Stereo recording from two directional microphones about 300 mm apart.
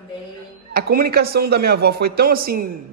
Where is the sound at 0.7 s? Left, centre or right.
Right.